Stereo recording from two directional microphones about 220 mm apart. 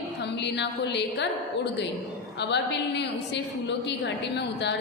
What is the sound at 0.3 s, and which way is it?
Speech, 50° left (ahead or behind).